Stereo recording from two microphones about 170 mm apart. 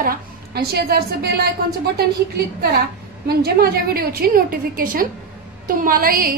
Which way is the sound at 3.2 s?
70° right (ahead or behind).